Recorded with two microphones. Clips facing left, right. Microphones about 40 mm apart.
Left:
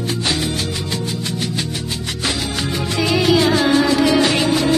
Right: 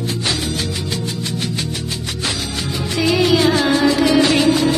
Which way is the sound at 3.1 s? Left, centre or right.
Centre.